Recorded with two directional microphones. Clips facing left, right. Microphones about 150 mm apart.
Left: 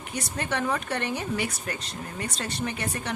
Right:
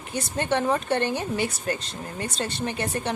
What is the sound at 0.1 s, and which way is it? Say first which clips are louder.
Speech: right 5 dB; 30° right (ahead or behind).